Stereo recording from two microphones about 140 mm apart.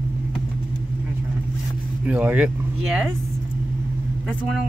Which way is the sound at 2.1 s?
10° right (ahead or behind).